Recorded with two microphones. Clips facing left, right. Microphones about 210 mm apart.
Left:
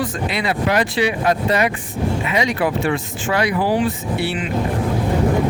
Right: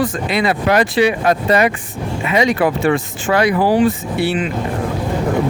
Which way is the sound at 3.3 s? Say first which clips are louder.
Right 4 dB; 50° right (ahead or behind).